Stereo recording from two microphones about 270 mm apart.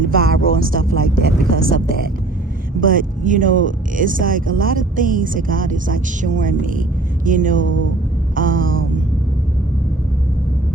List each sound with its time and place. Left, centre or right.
0.0 s speech: right
7.3 s a sound: right
8.4 s speech: right